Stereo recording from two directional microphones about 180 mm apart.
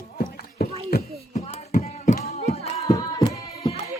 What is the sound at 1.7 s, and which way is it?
Hands, 45° left (ahead or behind).